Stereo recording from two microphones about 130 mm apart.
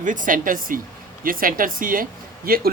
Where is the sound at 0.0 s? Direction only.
85° right.